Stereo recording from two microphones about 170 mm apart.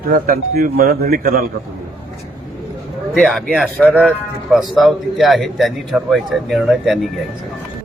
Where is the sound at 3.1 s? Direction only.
Centre (ahead or behind).